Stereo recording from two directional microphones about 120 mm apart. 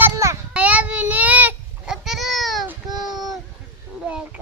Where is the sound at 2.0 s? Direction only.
Centre (ahead or behind).